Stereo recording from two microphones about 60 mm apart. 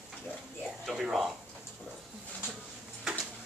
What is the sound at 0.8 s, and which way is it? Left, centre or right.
Speech, centre.